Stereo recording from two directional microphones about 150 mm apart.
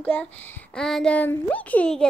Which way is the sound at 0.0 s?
10° left (ahead or behind).